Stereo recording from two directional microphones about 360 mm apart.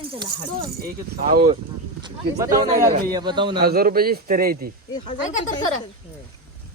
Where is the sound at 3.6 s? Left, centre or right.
Right.